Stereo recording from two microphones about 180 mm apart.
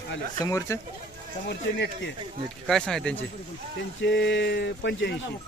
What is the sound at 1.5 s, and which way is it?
Speech, 75° left (ahead or behind).